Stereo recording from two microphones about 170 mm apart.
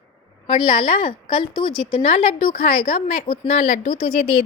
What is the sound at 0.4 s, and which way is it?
A woman's voice, 25° left (ahead or behind).